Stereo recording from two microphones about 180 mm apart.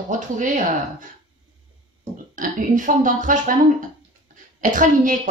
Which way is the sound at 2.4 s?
45° right (ahead or behind).